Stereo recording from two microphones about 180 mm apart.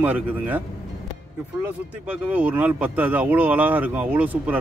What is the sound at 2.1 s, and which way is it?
Speech, 10° right (ahead or behind).